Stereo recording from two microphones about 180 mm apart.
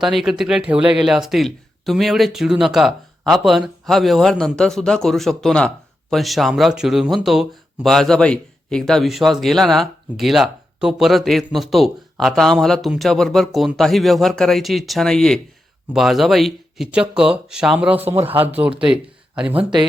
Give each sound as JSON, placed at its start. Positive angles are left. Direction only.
{"t": 0.0, "sound": "a man's voice", "side_deg": 0}
{"t": 19.5, "sound": "speech", "side_deg": -25}